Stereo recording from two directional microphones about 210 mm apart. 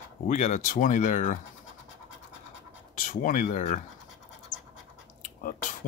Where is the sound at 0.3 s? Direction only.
35° left (ahead or behind).